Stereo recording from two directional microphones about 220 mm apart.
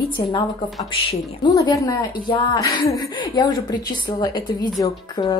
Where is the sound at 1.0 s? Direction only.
20° left (ahead or behind).